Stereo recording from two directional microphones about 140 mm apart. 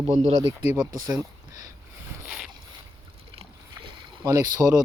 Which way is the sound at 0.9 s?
25° right (ahead or behind).